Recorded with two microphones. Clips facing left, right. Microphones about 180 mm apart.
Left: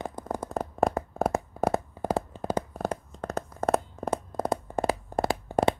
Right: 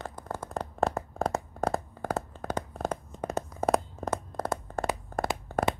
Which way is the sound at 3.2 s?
15° right (ahead or behind).